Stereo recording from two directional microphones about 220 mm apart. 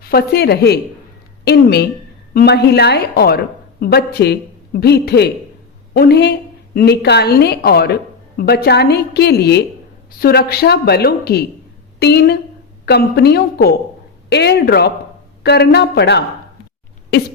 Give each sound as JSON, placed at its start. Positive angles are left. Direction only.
{"t": 0.0, "sound": "a woman's voice", "side_deg": 45}